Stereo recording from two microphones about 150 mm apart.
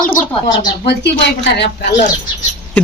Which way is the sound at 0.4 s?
30° left (ahead or behind).